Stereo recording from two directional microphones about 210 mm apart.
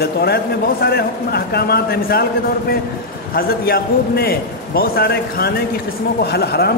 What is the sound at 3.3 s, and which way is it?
A man's voice, 45° left (ahead or behind).